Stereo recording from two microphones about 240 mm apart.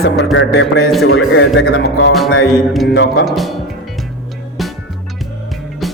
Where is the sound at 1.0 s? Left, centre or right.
Left.